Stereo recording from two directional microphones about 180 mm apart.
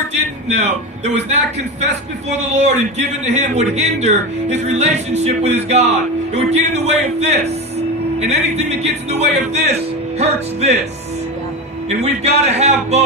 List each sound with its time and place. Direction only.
0.6 s a man's voice: 40° right (ahead or behind)
12.0 s a man's voice: 35° right (ahead or behind)